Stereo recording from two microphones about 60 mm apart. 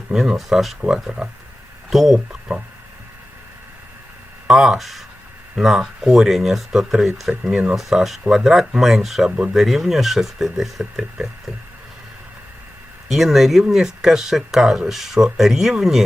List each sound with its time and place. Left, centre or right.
0.1 s speech: centre
2.3 s speech: centre
4.4 s speech: centre
7.5 s speech: centre
7.8 s speech: centre
9.3 s speech: centre
9.6 s speech: centre
13.1 s speech: centre